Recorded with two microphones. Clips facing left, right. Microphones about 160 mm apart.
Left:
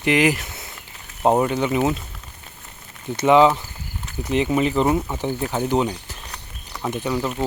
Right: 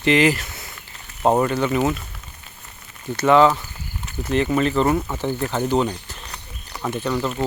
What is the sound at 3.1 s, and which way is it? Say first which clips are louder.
Speech: even; 15° left (ahead or behind).